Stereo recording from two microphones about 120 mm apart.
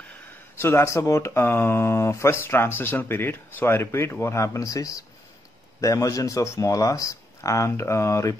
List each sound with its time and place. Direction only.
0.6 s speech: 20° left (ahead or behind)